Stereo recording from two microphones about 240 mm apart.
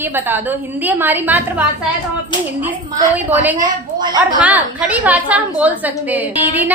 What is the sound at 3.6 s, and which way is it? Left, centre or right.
Speech, centre.